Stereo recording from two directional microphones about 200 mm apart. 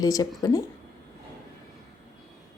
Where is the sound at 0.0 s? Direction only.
20° left (ahead or behind).